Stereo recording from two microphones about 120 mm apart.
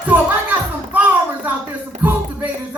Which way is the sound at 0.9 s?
15° right (ahead or behind).